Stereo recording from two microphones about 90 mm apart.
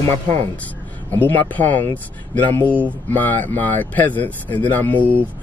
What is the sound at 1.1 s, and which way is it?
Speech, 20° left (ahead or behind).